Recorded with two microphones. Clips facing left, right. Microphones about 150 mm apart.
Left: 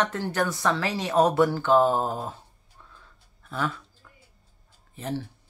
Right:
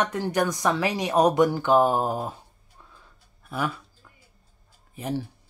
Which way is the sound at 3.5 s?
10° right (ahead or behind).